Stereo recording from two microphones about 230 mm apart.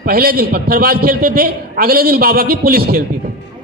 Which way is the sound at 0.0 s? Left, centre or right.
Right.